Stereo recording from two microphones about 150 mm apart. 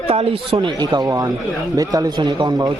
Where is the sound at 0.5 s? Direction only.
30° right (ahead or behind).